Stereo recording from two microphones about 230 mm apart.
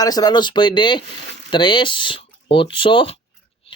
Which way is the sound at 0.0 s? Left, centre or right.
Centre.